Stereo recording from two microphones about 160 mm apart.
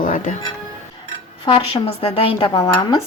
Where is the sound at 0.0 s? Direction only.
55° left (ahead or behind).